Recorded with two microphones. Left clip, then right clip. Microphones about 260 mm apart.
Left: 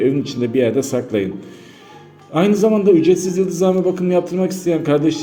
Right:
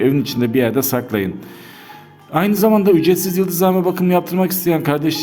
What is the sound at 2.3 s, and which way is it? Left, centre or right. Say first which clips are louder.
A man's voice: even; right.